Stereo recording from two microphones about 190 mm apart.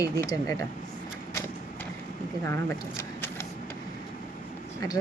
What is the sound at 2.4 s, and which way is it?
Speech, 15° left (ahead or behind).